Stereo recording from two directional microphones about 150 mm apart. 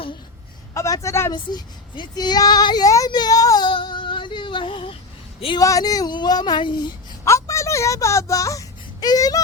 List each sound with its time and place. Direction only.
0.7 s a man's voice: 20° left (ahead or behind)
1.3 s child singing: 30° left (ahead or behind)
5.5 s speech: 25° left (ahead or behind)
7.3 s a sound: 20° left (ahead or behind)